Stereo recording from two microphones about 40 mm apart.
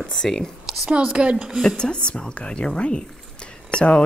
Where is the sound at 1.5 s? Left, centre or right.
Centre.